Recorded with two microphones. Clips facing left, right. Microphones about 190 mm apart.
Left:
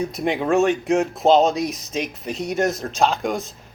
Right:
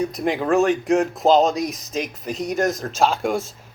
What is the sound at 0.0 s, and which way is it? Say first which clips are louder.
Speech: even; centre (ahead or behind).